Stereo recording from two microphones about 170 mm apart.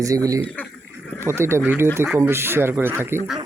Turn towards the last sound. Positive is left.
turn(degrees=-15)  # may be behind; listen again after turning